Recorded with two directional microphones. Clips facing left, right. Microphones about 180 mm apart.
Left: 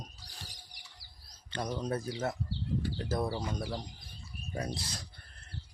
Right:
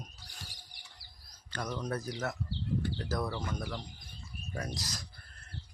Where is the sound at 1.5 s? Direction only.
25° left (ahead or behind).